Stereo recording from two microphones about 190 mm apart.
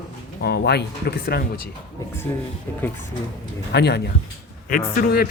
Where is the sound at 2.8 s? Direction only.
10° left (ahead or behind).